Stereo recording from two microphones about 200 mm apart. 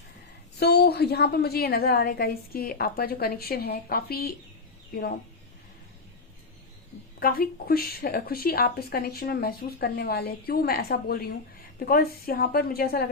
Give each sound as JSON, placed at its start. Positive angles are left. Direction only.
{"t": 0.6, "sound": "speech", "side_deg": 55}
{"t": 7.2, "sound": "speech", "side_deg": 45}